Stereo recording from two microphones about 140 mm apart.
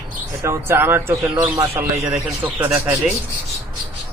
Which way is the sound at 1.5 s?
40° right (ahead or behind).